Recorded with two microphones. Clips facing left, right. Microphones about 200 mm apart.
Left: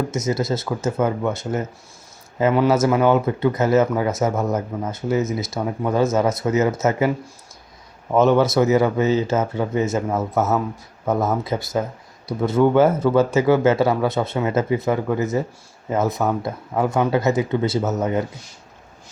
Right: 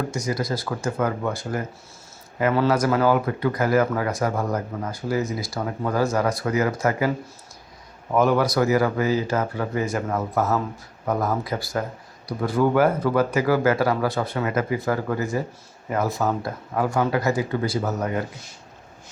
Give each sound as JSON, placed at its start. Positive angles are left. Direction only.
{"t": 0.1, "sound": "speech", "side_deg": 25}
{"t": 8.1, "sound": "speech", "side_deg": 25}